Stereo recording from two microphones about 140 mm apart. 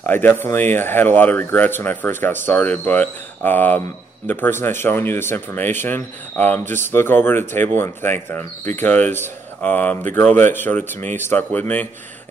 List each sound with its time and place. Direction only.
0.1 s speech: 15° left (ahead or behind)